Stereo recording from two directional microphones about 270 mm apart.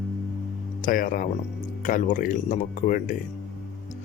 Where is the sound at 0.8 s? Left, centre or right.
Left.